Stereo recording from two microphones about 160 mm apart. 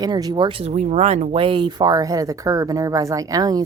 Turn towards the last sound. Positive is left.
turn(degrees=-20)  # may be behind; listen again after turning